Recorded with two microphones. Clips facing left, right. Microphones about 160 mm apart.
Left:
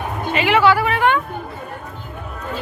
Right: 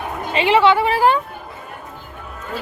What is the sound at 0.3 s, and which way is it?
Speech, 30° right (ahead or behind).